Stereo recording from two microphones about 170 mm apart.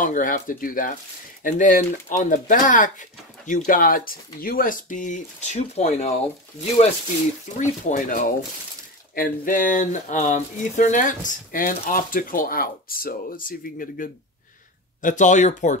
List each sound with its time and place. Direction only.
0.0 s speech: 50° left (ahead or behind)
7.5 s speech: 45° left (ahead or behind)